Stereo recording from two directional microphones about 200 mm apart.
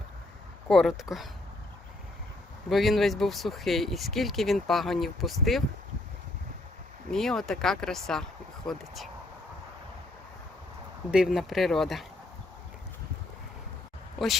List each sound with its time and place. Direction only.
0.7 s speech: centre (ahead or behind)
2.6 s speech: centre (ahead or behind)
7.1 s speech: centre (ahead or behind)
11.1 s speech: 5° right (ahead or behind)